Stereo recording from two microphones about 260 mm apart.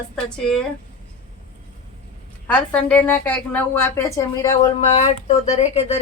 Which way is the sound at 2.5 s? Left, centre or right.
Centre.